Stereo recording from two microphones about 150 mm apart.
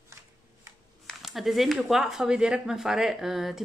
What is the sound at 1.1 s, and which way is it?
Speech, centre (ahead or behind).